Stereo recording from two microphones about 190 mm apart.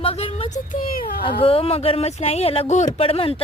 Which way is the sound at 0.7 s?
50° left (ahead or behind).